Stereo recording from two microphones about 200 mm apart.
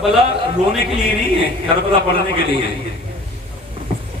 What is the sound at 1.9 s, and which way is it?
Speech, 25° right (ahead or behind).